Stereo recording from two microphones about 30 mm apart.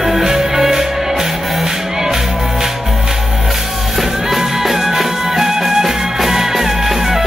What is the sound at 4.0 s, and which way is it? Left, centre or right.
Music, centre.